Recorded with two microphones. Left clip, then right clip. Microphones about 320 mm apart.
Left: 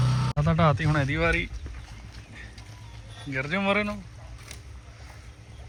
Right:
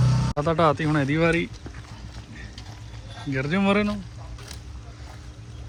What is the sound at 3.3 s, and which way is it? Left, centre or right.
Speech, centre.